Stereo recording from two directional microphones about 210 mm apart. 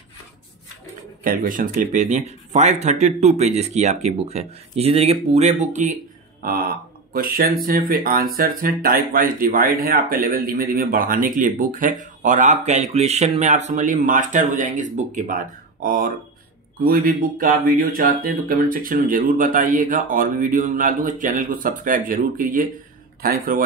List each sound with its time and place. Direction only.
1.2 s speech: 40° right (ahead or behind)
7.1 s speech: 45° right (ahead or behind)